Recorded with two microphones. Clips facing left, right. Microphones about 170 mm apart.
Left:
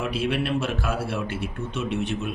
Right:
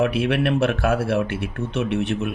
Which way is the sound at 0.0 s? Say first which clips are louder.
Right 6 dB; 60° right (ahead or behind).